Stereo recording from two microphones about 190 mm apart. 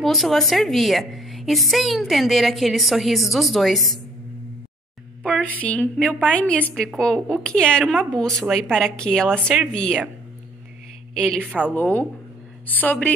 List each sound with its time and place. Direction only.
0.0 s a woman's voice: centre (ahead or behind)
5.2 s a woman's voice: 5° left (ahead or behind)
11.1 s a woman's voice: centre (ahead or behind)
11.7 s a woman's voice: 10° left (ahead or behind)